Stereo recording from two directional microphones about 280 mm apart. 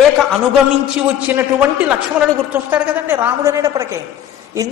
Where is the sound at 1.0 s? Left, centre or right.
Centre.